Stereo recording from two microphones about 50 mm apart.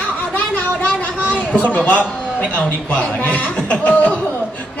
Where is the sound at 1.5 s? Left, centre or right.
Left.